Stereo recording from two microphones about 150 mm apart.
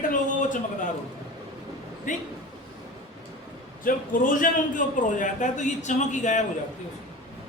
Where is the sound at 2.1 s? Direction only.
60° left (ahead or behind).